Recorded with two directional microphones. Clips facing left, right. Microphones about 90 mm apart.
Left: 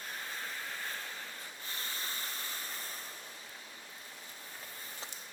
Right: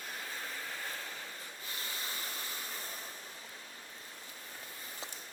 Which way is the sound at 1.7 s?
40° left (ahead or behind).